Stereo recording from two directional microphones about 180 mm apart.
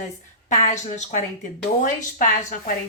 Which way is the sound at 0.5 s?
40° left (ahead or behind).